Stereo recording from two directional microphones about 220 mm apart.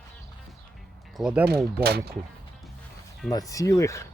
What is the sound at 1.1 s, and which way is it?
Speech, 5° right (ahead or behind).